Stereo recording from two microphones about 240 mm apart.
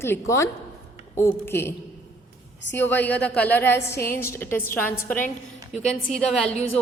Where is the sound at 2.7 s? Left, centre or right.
Centre.